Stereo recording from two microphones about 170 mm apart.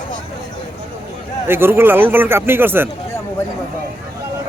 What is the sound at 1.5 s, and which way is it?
Speech, 15° right (ahead or behind).